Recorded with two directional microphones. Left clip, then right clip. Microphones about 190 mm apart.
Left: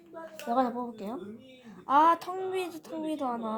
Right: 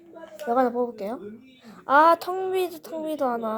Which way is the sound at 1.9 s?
40° right (ahead or behind).